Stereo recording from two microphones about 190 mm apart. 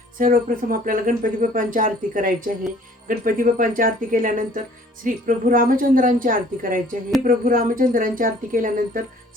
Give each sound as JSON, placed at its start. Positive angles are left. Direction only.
{"t": 0.2, "sound": "speech", "side_deg": -45}